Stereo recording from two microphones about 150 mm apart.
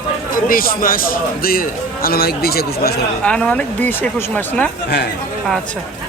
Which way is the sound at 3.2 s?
5° left (ahead or behind).